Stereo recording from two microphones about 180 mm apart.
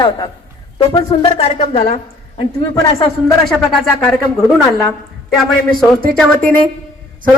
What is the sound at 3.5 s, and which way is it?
Speech, centre (ahead or behind).